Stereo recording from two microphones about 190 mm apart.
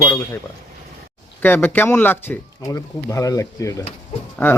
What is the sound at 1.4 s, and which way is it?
Speech, 10° left (ahead or behind).